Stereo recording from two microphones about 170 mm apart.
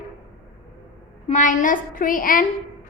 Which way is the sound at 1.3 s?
50° left (ahead or behind).